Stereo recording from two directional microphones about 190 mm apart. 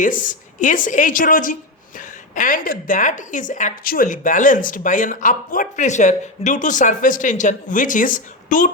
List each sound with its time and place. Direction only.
0.0 s a woman's voice: 45° left (ahead or behind)